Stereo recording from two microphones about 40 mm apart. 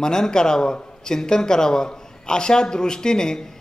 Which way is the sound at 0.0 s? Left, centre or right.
Centre.